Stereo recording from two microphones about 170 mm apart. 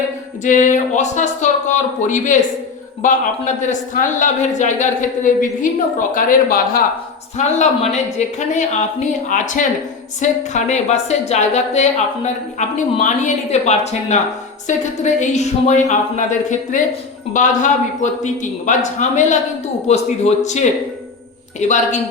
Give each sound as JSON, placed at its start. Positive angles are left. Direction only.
{"t": 0.4, "sound": "a man's voice", "side_deg": 50}
{"t": 7.3, "sound": "a man's voice", "side_deg": 45}